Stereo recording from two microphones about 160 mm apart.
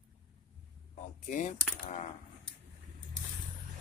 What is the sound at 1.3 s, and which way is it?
Speech, 50° left (ahead or behind).